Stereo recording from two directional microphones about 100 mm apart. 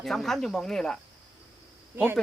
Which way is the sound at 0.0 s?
5° left (ahead or behind).